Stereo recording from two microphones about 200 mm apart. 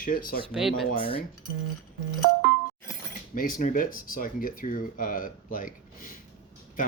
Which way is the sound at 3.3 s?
45° left (ahead or behind).